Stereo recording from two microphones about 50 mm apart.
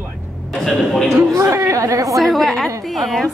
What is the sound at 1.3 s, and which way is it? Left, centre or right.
Speech, right.